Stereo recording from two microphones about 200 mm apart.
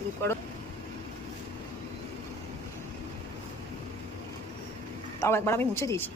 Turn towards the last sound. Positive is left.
turn(degrees=15)  # may be behind; listen again after turning